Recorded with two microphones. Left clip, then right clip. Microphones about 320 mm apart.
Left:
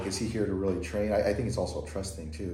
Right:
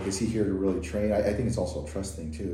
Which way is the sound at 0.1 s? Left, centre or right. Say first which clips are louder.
Right 4 dB; centre.